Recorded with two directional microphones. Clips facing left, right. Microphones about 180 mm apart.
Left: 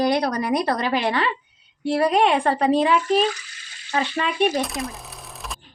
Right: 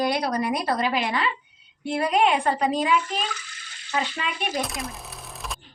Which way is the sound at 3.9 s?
50° left (ahead or behind).